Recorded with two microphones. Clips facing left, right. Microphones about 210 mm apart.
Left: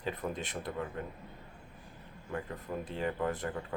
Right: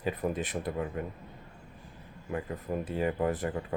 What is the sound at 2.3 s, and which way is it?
Speech, 20° right (ahead or behind).